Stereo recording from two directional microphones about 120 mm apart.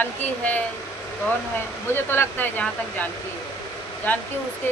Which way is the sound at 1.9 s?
20° left (ahead or behind).